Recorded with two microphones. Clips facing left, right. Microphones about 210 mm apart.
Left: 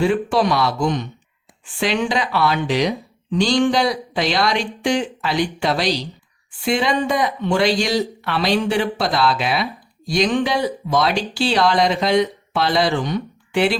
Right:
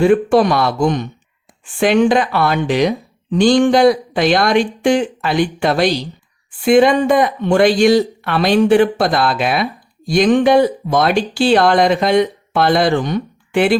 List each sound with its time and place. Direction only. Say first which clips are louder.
0.0 s speech: right 6 dB; 50° right (ahead or behind)